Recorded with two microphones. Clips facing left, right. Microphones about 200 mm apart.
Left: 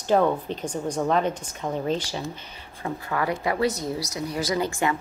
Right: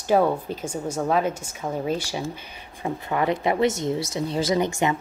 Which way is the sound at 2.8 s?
20° right (ahead or behind).